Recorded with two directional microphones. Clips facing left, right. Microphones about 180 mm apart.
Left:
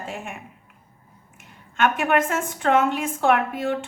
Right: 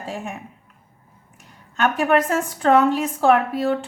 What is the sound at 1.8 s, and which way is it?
A woman's voice, 35° right (ahead or behind).